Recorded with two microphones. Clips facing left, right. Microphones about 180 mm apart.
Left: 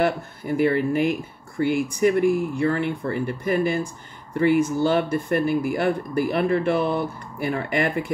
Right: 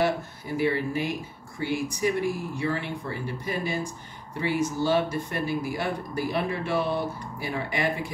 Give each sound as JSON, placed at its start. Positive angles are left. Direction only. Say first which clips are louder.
{"t": 0.0, "sound": "speech", "louder": "left 3 dB", "side_deg": 55}